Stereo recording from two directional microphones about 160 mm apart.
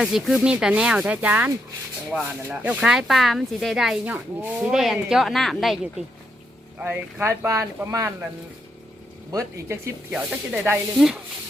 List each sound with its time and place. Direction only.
0.0 s speech: centre (ahead or behind)
6.7 s speech: 10° right (ahead or behind)
9.3 s speech: 20° right (ahead or behind)
10.1 s speech: 5° right (ahead or behind)